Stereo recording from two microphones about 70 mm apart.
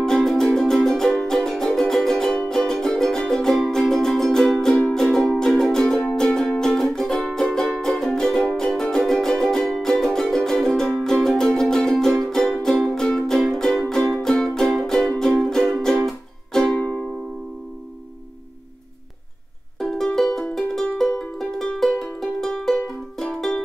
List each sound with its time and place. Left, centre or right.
0.0 s music: centre
16.6 s music: centre
19.8 s music: centre